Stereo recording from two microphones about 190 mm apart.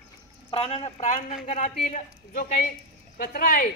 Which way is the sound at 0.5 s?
30° left (ahead or behind).